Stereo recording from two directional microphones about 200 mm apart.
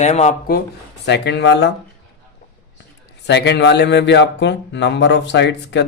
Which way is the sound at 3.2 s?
60° left (ahead or behind).